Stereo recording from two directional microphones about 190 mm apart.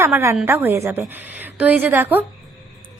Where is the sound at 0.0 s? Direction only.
15° right (ahead or behind).